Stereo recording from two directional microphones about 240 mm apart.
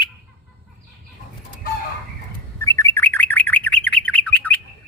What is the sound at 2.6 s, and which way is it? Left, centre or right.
Bird, centre.